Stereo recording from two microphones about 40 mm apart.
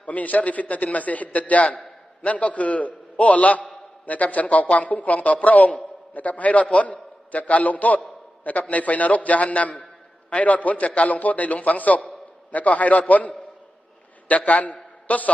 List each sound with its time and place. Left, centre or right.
0.0 s a man's voice: left